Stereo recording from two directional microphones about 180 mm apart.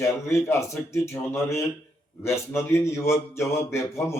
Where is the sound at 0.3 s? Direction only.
15° left (ahead or behind).